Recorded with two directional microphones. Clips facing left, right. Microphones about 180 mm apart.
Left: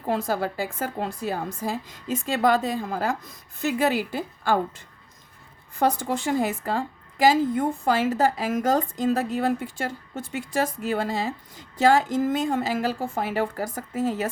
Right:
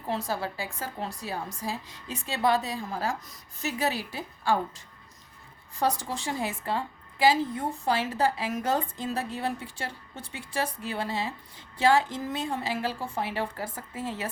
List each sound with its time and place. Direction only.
0.2 s a woman's voice: 90° left
0.4 s a woman's voice: 50° left (ahead or behind)
5.8 s a woman's voice: 55° left (ahead or behind)